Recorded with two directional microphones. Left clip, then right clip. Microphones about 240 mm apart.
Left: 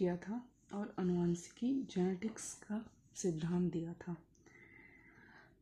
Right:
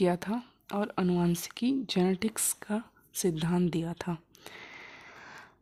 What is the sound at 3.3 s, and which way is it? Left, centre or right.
Speech, right.